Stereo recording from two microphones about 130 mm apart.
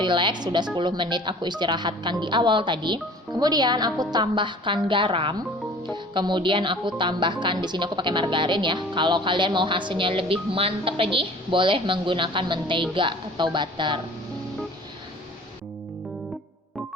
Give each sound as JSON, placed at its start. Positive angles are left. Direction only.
{"t": 0.0, "sound": "speech", "side_deg": -35}